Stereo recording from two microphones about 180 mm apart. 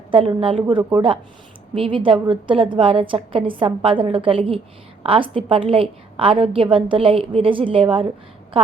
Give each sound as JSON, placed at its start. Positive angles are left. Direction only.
{"t": 0.1, "sound": "a woman's voice", "side_deg": -30}